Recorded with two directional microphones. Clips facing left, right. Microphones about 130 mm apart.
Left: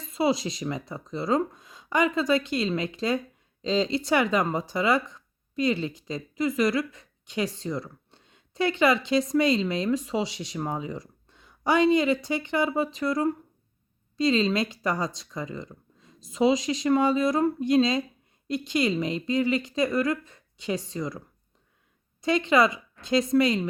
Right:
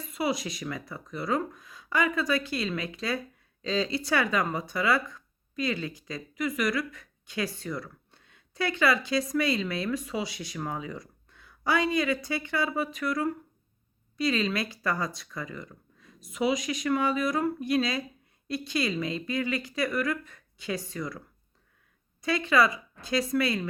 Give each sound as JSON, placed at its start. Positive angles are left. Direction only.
{"t": 0.1, "sound": "speech", "side_deg": 25}
{"t": 22.2, "sound": "speech", "side_deg": 20}